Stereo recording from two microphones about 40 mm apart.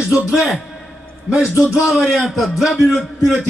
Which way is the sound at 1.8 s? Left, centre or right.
Centre.